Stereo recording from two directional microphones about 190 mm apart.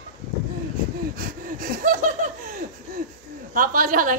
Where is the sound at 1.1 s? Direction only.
45° right (ahead or behind).